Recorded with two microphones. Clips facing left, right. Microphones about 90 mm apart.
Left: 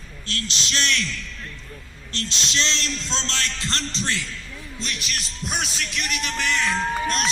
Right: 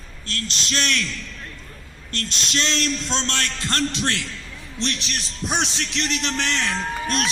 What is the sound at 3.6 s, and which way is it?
Speech, 55° right (ahead or behind).